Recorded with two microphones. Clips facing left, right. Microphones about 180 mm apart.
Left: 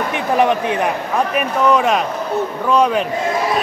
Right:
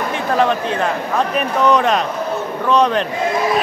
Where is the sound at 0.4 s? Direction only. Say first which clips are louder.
Left 2 dB; 15° left (ahead or behind).